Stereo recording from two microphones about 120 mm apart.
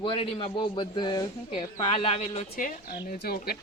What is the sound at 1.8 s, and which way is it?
Speech, 50° left (ahead or behind).